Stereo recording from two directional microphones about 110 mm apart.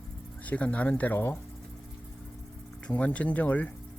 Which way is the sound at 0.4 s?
15° left (ahead or behind).